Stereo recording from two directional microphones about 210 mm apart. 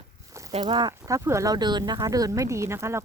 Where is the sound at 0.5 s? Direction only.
20° right (ahead or behind).